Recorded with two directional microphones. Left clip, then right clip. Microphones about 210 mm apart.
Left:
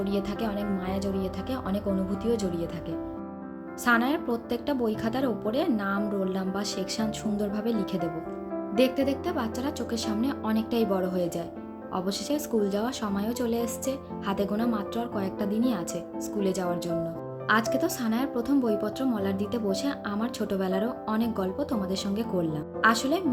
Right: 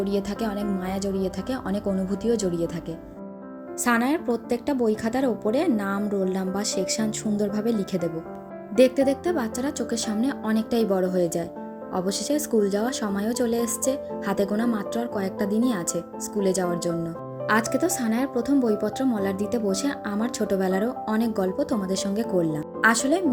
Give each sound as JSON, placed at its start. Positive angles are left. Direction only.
{"t": 0.0, "sound": "speech", "side_deg": -25}
{"t": 3.8, "sound": "speech", "side_deg": -20}